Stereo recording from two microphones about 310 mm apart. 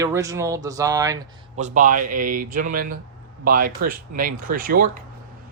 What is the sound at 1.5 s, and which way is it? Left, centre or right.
Speech, right.